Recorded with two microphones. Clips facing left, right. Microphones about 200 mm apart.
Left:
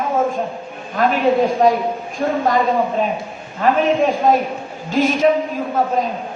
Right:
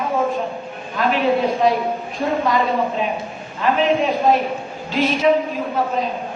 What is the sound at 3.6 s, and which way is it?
A woman's voice, 45° left (ahead or behind).